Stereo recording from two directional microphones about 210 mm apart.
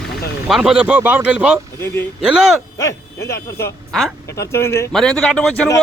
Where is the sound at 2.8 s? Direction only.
15° left (ahead or behind).